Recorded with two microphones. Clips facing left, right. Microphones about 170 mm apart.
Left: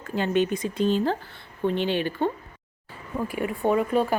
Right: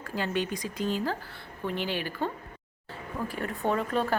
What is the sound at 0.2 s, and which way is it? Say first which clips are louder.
Speech: left 7 dB; 25° left (ahead or behind).